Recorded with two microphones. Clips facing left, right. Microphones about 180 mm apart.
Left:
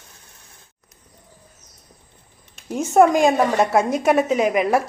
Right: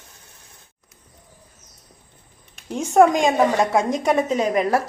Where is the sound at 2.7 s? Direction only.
5° left (ahead or behind).